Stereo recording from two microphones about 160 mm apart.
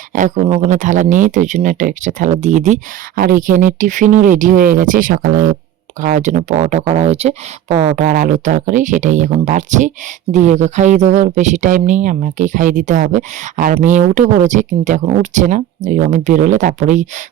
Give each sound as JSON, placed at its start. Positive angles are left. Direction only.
{"t": 0.1, "sound": "speech", "side_deg": -55}
{"t": 3.2, "sound": "speech", "side_deg": -60}